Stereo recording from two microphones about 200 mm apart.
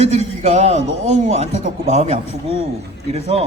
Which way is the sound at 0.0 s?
35° right (ahead or behind).